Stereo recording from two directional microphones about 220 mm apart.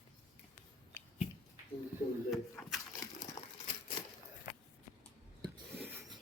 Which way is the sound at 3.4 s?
15° left (ahead or behind).